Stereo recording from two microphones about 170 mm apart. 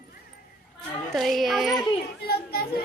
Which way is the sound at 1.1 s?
Centre (ahead or behind).